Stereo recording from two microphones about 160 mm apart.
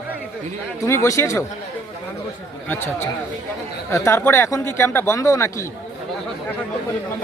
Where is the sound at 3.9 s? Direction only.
15° left (ahead or behind).